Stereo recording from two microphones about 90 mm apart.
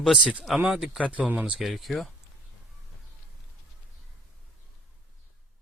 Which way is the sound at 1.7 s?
Centre (ahead or behind).